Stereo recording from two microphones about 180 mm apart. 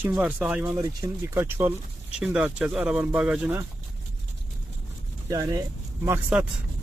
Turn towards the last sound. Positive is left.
turn(degrees=-10)  # may be behind; listen again after turning